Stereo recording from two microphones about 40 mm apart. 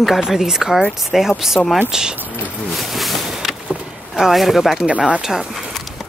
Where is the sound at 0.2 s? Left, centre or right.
Centre.